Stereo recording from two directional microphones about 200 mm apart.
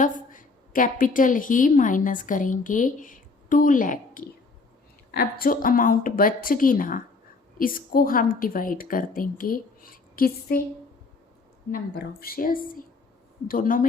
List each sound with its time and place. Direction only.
0.0 s a woman's voice: 40° left (ahead or behind)
11.7 s a woman's voice: 50° left (ahead or behind)